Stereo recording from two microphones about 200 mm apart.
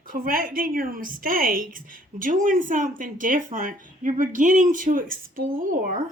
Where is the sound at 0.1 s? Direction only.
45° right (ahead or behind).